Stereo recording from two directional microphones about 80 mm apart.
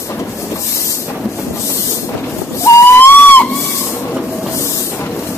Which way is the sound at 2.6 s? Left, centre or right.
Left.